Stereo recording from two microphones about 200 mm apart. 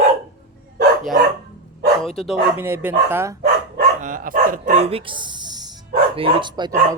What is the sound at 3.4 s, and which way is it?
Dog, 45° right (ahead or behind).